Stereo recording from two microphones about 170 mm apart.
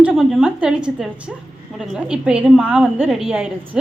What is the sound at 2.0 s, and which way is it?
A woman's voice, 5° right (ahead or behind).